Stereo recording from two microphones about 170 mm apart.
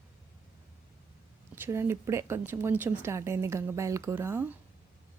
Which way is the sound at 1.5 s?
15° right (ahead or behind).